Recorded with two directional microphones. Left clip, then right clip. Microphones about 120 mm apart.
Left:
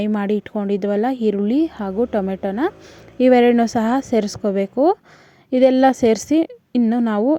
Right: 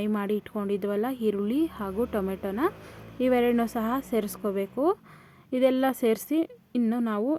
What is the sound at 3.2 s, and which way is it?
A woman's voice, 45° left (ahead or behind).